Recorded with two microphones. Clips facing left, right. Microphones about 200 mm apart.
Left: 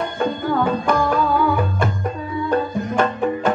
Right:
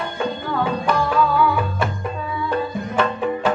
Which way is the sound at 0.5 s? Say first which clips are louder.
Left 2 dB; 45° left (ahead or behind).